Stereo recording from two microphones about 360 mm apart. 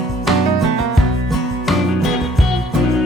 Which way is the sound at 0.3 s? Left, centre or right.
Centre.